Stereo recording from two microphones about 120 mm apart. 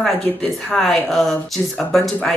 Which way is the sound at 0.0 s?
5° left (ahead or behind).